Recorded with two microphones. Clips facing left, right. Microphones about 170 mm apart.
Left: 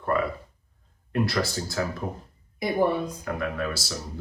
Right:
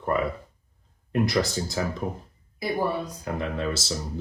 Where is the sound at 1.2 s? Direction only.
20° right (ahead or behind).